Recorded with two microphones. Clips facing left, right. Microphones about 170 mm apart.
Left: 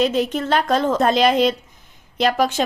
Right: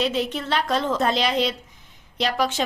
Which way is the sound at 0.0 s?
45° left (ahead or behind).